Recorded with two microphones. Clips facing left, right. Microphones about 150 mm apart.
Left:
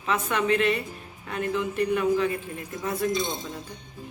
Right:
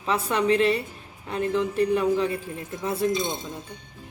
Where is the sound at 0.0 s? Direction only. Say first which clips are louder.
Right 2 dB; 30° right (ahead or behind).